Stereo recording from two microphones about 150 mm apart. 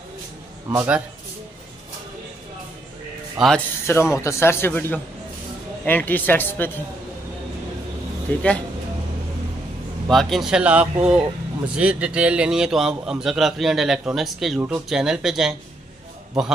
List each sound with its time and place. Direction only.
0.7 s a man's voice: 20° right (ahead or behind)
3.3 s a man's voice: 5° left (ahead or behind)
3.8 s a man's voice: 15° left (ahead or behind)
8.4 s a man's voice: 5° left (ahead or behind)
10.0 s a man's voice: centre (ahead or behind)